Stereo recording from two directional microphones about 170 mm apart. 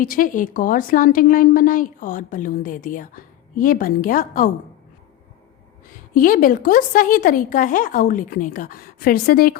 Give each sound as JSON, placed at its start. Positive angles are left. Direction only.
{"t": 0.0, "sound": "a woman's voice", "side_deg": 55}
{"t": 6.1, "sound": "speech", "side_deg": 55}